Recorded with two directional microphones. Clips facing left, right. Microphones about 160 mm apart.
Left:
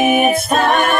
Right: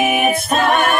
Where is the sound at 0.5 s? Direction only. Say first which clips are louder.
Right 1 dB; 40° left (ahead or behind).